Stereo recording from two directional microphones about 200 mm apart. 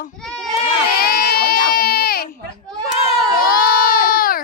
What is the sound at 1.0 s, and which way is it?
Baby cry, 50° left (ahead or behind).